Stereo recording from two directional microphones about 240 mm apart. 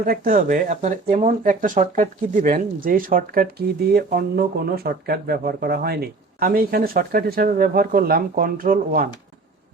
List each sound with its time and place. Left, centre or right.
0.0 s speech: right